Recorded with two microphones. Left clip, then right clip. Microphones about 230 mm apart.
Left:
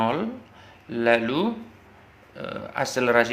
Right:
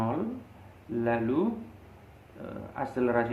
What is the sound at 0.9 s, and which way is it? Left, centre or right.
Speech, left.